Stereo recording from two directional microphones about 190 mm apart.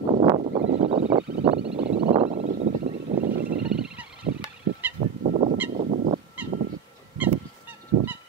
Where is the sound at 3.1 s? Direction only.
50° right (ahead or behind).